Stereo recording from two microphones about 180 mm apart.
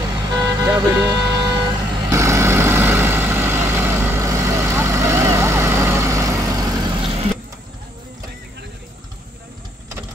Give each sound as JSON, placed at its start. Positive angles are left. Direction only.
{"t": 0.0, "sound": "vehicle", "side_deg": -20}